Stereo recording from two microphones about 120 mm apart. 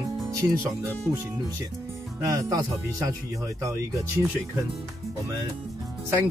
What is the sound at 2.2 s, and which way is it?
Speech, 30° right (ahead or behind).